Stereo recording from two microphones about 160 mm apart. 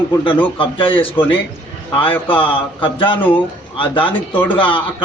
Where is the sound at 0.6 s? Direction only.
35° left (ahead or behind).